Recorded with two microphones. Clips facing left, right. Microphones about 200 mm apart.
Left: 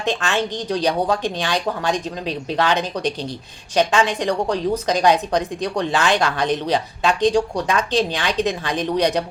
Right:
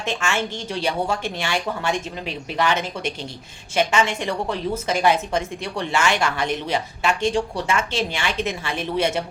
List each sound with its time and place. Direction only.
0.0 s speech: 15° left (ahead or behind)